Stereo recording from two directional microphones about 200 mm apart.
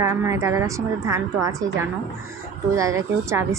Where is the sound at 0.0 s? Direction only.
15° right (ahead or behind).